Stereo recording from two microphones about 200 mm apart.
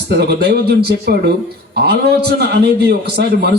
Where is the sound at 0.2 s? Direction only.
55° right (ahead or behind).